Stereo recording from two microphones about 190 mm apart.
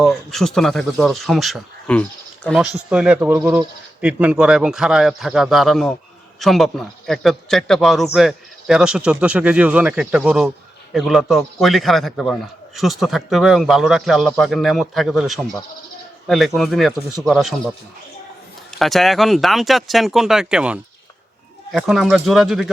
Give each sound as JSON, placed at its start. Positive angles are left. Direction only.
{"t": 0.0, "sound": "a man's voice", "side_deg": 0}
{"t": 2.7, "sound": "a man's voice", "side_deg": -5}
{"t": 18.8, "sound": "a man's voice", "side_deg": 0}